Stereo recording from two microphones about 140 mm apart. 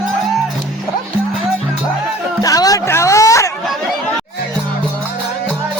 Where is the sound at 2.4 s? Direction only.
25° left (ahead or behind).